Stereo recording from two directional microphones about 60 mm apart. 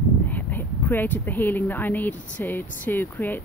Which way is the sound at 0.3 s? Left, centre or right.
Left.